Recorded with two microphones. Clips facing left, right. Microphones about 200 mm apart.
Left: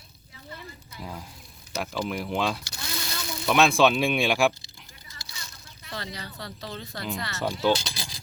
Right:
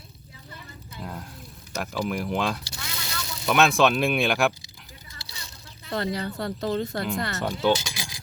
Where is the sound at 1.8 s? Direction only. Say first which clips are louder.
Right 3 dB; centre (ahead or behind).